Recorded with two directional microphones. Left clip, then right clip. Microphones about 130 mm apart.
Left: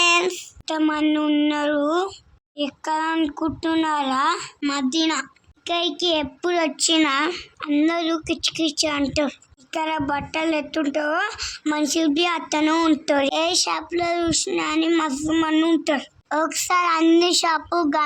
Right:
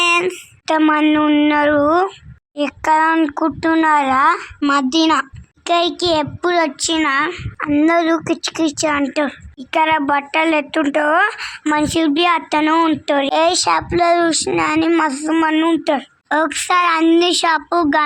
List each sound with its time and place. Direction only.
0.6 s a child's voice: 25° right (ahead or behind)
7.9 s a child's voice: 35° right (ahead or behind)
8.9 s speech: 10° right (ahead or behind)
9.6 s a child's voice: 30° right (ahead or behind)
12.6 s speech: 10° right (ahead or behind)
15.5 s speech: 15° right (ahead or behind)
15.8 s speech: 30° right (ahead or behind)
16.3 s speech: 15° right (ahead or behind)